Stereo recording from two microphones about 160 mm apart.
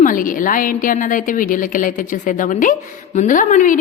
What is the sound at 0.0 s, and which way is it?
A woman's voice, 60° left (ahead or behind).